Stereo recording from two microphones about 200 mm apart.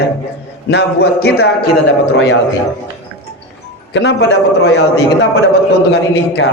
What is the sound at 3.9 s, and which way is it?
Speech, 55° left (ahead or behind).